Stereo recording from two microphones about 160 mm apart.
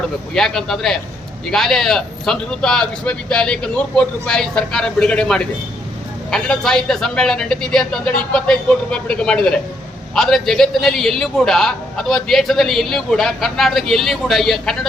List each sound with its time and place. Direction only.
0.3 s a man's voice: centre (ahead or behind)